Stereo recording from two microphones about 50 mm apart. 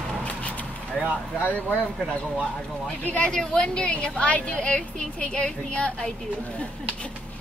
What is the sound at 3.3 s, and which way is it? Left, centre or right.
A woman's voice, centre.